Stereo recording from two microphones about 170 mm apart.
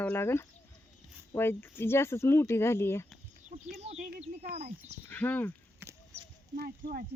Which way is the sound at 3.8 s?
40° right (ahead or behind).